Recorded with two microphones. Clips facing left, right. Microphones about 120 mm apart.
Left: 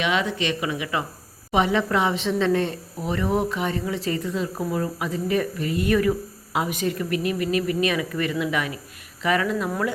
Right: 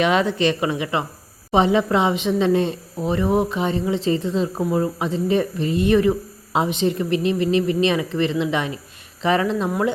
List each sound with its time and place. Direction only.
0.0 s a woman's voice: 40° right (ahead or behind)